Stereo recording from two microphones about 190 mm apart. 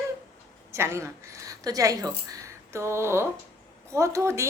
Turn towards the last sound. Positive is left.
turn(degrees=-15)  # may be behind; listen again after turning